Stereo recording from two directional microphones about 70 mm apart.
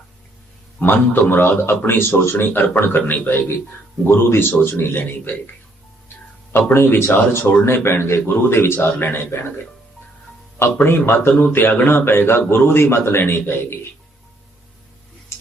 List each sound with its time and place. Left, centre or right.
0.8 s a man's voice: left
6.5 s a man's voice: left
10.8 s a man's voice: left